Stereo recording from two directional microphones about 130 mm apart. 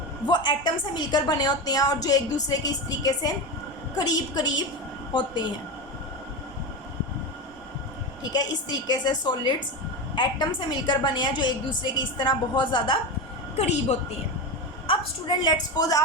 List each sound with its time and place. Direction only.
0.3 s a woman's voice: 35° left (ahead or behind)
8.3 s a woman's voice: 30° left (ahead or behind)
13.6 s a woman's voice: 60° left (ahead or behind)
14.8 s a woman's voice: 35° left (ahead or behind)